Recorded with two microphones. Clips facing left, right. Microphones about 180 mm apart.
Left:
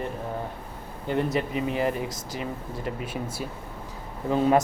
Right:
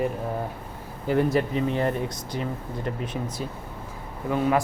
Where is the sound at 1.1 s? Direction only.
Centre (ahead or behind).